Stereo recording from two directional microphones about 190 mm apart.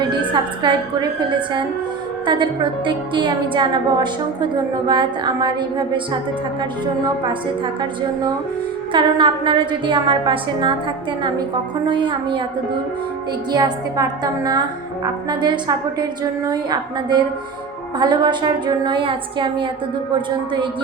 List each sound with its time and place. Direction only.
0.0 s a woman's voice: 25° right (ahead or behind)
8.9 s a woman's voice: 25° right (ahead or behind)
11.9 s a woman's voice: 25° right (ahead or behind)
13.5 s a woman's voice: 20° right (ahead or behind)